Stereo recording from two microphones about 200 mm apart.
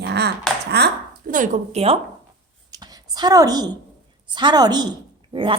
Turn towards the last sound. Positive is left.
turn(degrees=-25)  # may be behind; listen again after turning